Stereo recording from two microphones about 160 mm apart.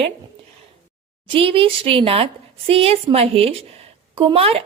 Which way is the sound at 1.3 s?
35° right (ahead or behind).